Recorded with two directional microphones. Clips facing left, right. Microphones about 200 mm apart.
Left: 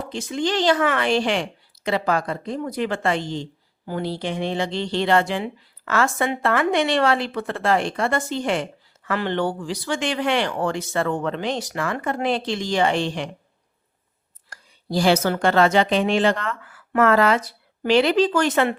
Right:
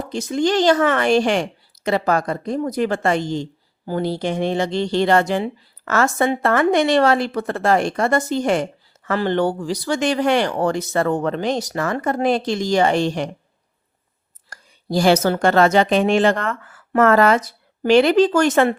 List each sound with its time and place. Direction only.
0.0 s speech: 40° right (ahead or behind)
14.5 s speech: 45° right (ahead or behind)